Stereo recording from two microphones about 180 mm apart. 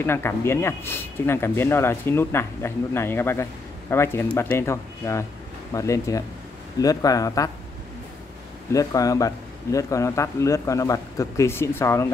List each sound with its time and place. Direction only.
0.0 s a man's voice: 15° left (ahead or behind)
8.7 s speech: 20° left (ahead or behind)